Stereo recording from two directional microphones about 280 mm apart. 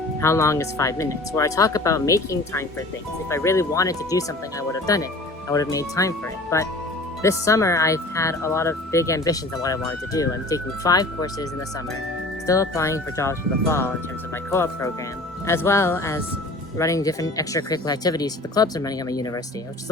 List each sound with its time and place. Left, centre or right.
0.2 s speech: centre
12.5 s speech: centre